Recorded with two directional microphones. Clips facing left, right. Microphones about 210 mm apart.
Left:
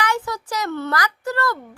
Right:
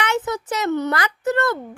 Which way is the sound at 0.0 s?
25° right (ahead or behind).